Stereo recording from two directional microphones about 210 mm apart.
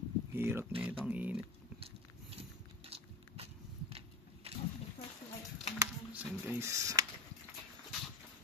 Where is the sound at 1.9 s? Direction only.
25° right (ahead or behind).